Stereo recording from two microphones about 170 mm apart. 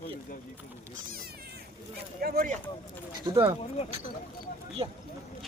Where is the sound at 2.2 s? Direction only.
60° right (ahead or behind).